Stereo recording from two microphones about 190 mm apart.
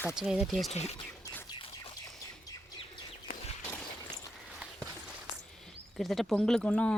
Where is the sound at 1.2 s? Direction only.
10° left (ahead or behind).